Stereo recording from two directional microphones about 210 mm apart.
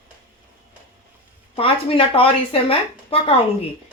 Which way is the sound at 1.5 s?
25° left (ahead or behind).